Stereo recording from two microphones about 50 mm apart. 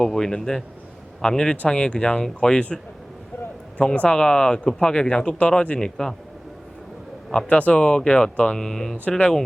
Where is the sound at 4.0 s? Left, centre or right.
Centre.